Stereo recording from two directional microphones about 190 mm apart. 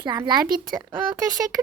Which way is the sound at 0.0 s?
20° right (ahead or behind).